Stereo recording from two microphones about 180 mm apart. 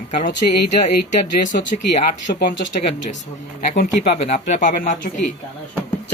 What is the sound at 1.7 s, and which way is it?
Speech, 50° left (ahead or behind).